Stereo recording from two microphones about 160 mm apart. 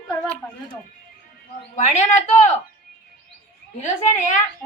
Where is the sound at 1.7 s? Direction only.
50° left (ahead or behind).